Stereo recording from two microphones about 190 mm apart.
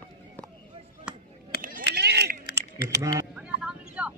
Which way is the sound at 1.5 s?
55° left (ahead or behind).